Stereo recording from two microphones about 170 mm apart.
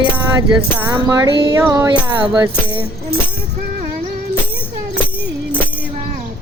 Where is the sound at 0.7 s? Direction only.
15° right (ahead or behind).